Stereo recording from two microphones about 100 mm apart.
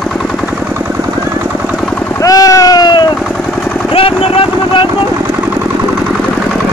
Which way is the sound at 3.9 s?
65° left (ahead or behind).